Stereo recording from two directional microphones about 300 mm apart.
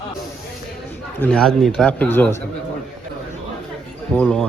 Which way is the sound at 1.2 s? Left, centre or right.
Centre.